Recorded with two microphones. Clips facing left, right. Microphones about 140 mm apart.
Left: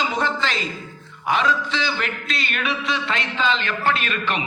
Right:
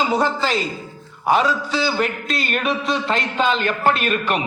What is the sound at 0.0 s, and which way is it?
Speech, 35° right (ahead or behind).